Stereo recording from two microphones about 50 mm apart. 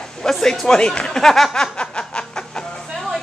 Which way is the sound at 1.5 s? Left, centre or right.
Centre.